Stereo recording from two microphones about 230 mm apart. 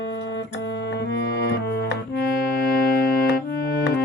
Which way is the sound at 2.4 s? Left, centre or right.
Left.